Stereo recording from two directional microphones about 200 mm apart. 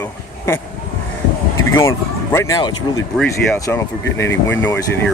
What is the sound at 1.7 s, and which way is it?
Speech, 15° left (ahead or behind).